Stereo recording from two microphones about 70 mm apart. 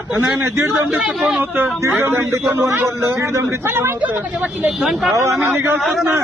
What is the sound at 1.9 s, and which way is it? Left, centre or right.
A man's voice, right.